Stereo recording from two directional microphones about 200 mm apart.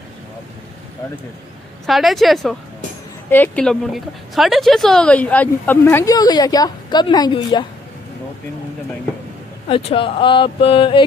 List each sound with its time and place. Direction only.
1.9 s a woman's voice: centre (ahead or behind); by 7.6 s 20° left (ahead or behind)
9.7 s speech: 25° left (ahead or behind)